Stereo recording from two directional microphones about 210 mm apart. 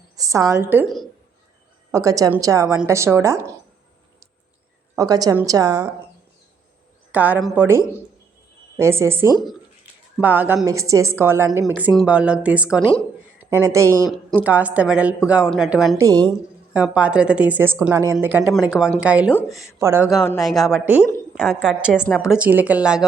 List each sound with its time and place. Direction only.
0.2 s a woman's voice: 15° right (ahead or behind)
1.9 s a woman's voice: 15° right (ahead or behind)
4.9 s a woman's voice: 15° right (ahead or behind)
7.1 s a woman's voice: 5° right (ahead or behind)
8.8 s a woman's voice: 10° right (ahead or behind)
13.4 s a sound: 10° right (ahead or behind)
13.7 s a woman's voice: 15° right (ahead or behind)
16.0 s a woman's voice: 15° right (ahead or behind)
16.7 s a woman's voice: 5° right (ahead or behind)
20.1 s a woman's voice: centre (ahead or behind)